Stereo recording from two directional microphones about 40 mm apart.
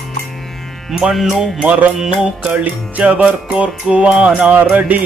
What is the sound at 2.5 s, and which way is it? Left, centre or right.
Music, right.